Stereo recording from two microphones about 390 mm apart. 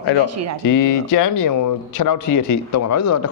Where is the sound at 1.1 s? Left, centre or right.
Left.